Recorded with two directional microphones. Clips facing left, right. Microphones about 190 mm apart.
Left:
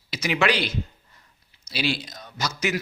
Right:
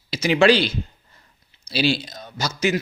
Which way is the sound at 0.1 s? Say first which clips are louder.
Right 7 dB; 30° right (ahead or behind).